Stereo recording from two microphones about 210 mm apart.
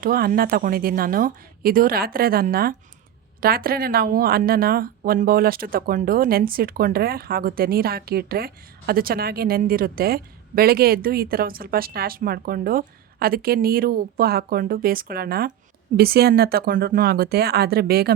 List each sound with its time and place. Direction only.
0.0 s speech: 45° right (ahead or behind)